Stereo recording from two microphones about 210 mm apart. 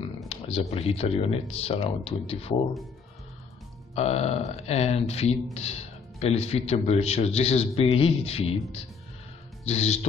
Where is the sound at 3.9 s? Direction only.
30° left (ahead or behind).